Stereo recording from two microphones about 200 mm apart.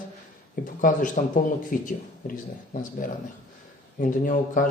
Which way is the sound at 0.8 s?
40° left (ahead or behind).